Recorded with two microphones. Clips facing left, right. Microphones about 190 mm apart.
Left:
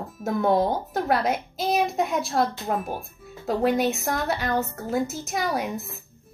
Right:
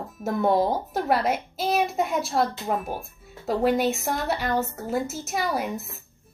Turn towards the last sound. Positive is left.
turn(degrees=0)  # may be behind; listen again after turning